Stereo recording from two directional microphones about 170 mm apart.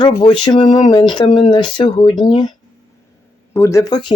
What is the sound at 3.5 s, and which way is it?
Speech, 15° left (ahead or behind).